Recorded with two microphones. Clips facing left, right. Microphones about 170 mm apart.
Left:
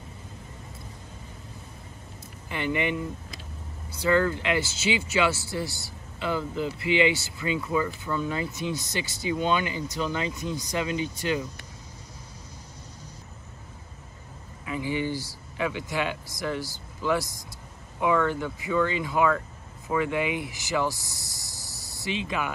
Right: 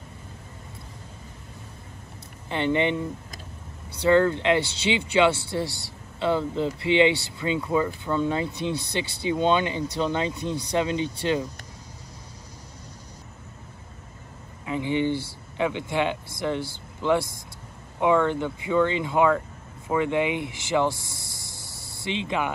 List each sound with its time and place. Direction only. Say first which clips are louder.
2.5 s speech: right 4 dB; 25° right (ahead or behind)
4.0 s speech: right 4 dB; 25° right (ahead or behind)
14.7 s speech: right 4 dB; 25° right (ahead or behind)
22.0 s speech: right 3 dB; 25° right (ahead or behind)